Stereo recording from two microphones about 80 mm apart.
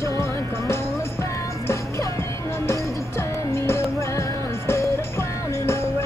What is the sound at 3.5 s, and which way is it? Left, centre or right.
Music, left.